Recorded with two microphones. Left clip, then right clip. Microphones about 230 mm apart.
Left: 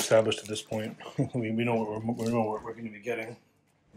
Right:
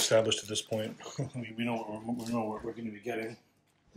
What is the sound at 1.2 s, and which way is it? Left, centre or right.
Speech, centre.